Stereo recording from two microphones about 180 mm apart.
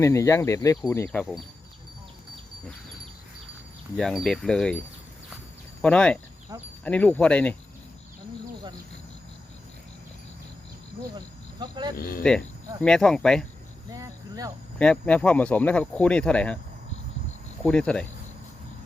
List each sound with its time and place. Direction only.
0.0 s speech: 15° left (ahead or behind)
3.9 s speech: centre (ahead or behind)
5.8 s speech: 5° left (ahead or behind)
6.5 s speech: 15° right (ahead or behind)
6.8 s speech: 10° left (ahead or behind)
11.6 s speech: 25° right (ahead or behind)
11.9 s speech: 55° left (ahead or behind)
12.8 s speech: 5° left (ahead or behind)
13.9 s cricket: 20° right (ahead or behind)
14.8 s speech: 5° left (ahead or behind)
17.7 s speech: 5° left (ahead or behind)